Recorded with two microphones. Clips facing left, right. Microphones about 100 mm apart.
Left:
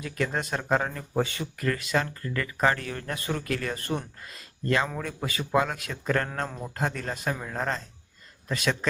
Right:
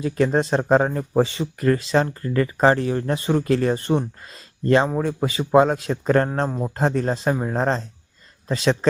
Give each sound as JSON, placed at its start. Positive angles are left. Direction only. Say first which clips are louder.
{"t": 0.0, "sound": "speech", "louder": "right 10 dB", "side_deg": -30}